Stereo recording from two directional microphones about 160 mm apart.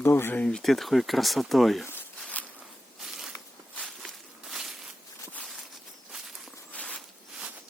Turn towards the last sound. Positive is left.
turn(degrees=5)  # may be behind; listen again after turning